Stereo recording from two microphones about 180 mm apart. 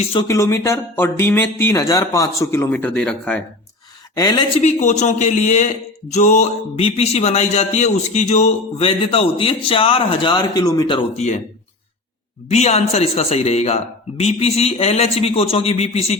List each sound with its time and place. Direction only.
0.0 s a woman's voice: 30° left (ahead or behind)
0.3 s speech: 15° left (ahead or behind)
4.1 s a woman's voice: 20° left (ahead or behind)
4.5 s speech: 40° left (ahead or behind); by 11.0 s 25° left (ahead or behind)
11.2 s speech: 40° left (ahead or behind)
12.5 s speech: 35° left (ahead or behind)